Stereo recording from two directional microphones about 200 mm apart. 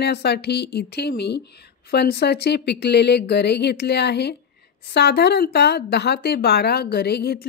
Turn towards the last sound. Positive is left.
turn(degrees=50)  # may be behind; listen again after turning